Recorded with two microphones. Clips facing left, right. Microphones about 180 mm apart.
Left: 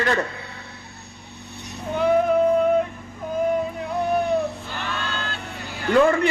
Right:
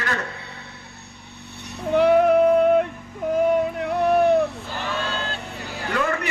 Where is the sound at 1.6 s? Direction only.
65° right (ahead or behind).